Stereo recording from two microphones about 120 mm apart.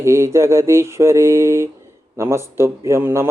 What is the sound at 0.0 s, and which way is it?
A man's voice, 25° right (ahead or behind).